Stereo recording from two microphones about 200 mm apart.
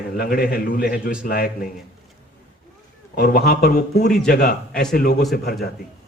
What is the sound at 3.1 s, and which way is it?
A man's voice, 50° left (ahead or behind).